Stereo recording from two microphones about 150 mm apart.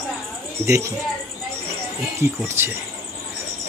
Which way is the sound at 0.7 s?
20° right (ahead or behind).